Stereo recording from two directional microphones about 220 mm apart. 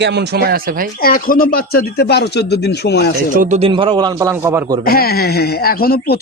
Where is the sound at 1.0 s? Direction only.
40° left (ahead or behind).